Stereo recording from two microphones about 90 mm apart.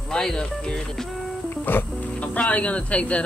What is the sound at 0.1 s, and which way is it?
Speech, 5° left (ahead or behind).